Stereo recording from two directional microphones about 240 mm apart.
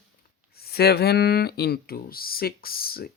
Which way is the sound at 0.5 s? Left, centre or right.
Left.